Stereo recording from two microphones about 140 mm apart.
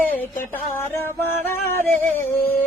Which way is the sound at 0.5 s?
15° left (ahead or behind).